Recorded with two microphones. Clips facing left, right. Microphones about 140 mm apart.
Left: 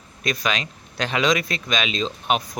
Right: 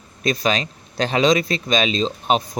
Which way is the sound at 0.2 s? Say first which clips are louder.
Right 5 dB; 30° right (ahead or behind).